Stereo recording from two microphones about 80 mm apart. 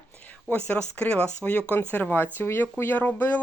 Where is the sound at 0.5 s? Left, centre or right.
Centre.